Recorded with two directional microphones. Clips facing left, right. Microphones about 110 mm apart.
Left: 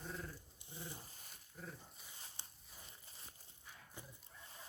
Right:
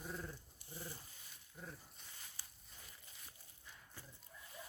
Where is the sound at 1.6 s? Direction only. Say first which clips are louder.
Left 1 dB; centre (ahead or behind).